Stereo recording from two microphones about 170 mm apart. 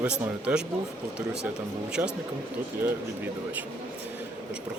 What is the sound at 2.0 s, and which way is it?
Speech, 15° right (ahead or behind).